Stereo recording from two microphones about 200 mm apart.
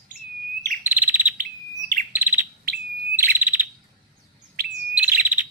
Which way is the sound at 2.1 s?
10° right (ahead or behind).